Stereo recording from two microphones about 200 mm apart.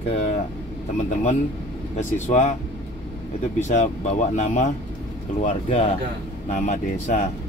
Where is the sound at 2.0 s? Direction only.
40° left (ahead or behind).